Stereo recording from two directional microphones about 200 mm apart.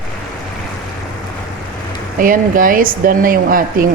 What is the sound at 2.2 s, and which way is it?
Speech, 45° right (ahead or behind).